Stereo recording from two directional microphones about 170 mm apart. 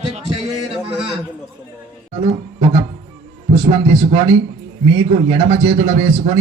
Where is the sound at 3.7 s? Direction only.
35° right (ahead or behind).